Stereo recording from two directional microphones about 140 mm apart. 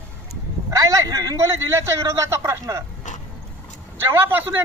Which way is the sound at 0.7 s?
25° right (ahead or behind).